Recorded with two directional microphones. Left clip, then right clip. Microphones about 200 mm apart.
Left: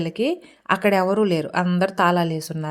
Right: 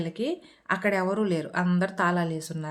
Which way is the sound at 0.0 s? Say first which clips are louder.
Left 7 dB; 35° left (ahead or behind).